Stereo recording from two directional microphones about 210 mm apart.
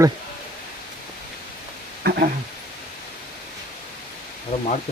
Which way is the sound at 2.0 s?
50° right (ahead or behind).